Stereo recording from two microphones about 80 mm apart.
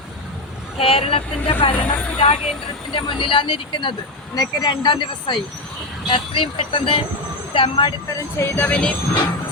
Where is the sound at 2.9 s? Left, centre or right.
Left.